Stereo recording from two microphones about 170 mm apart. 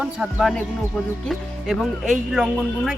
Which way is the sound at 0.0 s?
5° right (ahead or behind).